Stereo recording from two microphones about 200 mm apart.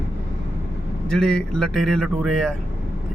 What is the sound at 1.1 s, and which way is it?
Speech, centre (ahead or behind).